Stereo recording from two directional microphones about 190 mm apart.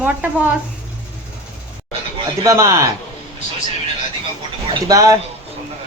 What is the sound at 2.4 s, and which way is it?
Speech, 15° right (ahead or behind).